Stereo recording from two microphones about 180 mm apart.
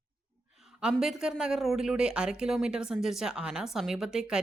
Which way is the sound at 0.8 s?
5° right (ahead or behind).